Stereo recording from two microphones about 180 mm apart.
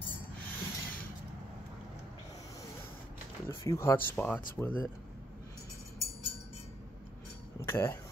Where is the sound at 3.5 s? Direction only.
15° left (ahead or behind).